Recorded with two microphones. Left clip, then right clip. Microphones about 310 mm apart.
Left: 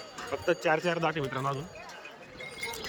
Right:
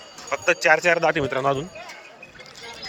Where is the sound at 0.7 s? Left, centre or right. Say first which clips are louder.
Right 10 dB; right.